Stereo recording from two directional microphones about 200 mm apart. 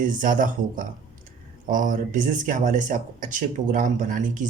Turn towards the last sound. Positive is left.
turn(degrees=-40)  # may be behind; listen again after turning